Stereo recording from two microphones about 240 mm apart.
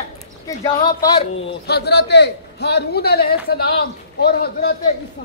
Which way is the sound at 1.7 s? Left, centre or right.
Left.